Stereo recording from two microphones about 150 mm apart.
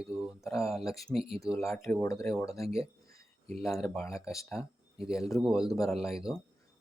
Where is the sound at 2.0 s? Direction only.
20° left (ahead or behind).